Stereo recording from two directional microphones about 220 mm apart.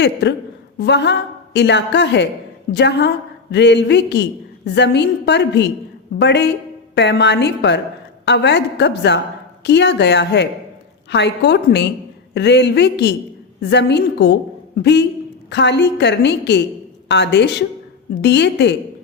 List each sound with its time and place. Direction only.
0.0 s a woman's voice: 50° left (ahead or behind)